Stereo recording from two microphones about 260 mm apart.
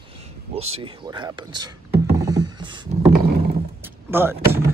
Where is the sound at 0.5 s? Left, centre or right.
Right.